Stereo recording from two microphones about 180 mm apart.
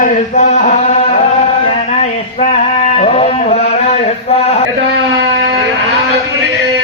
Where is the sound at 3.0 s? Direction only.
35° left (ahead or behind).